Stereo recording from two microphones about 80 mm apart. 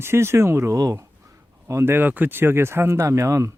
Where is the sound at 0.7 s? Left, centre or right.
Right.